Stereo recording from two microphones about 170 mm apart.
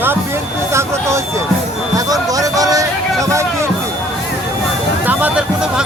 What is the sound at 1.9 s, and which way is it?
Music, 20° right (ahead or behind).